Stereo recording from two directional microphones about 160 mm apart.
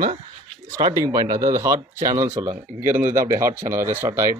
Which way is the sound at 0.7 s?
25° right (ahead or behind).